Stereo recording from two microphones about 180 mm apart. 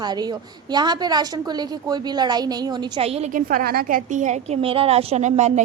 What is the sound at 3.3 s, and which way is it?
A woman's voice, 50° right (ahead or behind).